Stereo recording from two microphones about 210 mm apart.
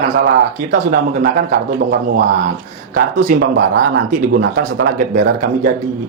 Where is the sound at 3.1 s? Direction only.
40° right (ahead or behind).